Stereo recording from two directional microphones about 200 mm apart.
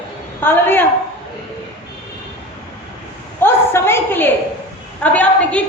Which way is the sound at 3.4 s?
10° left (ahead or behind).